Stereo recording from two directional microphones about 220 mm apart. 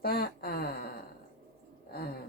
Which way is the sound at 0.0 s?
45° left (ahead or behind).